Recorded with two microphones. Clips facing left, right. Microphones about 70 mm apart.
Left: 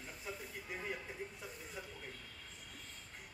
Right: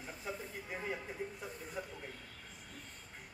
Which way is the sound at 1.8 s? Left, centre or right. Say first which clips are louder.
Right 6 dB; centre.